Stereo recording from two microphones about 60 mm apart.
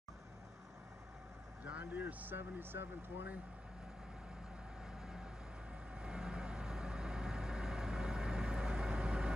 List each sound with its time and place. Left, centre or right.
1.6 s speech: right
5.0 s vehicle: centre